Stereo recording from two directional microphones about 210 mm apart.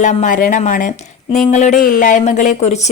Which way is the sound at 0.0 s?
35° left (ahead or behind).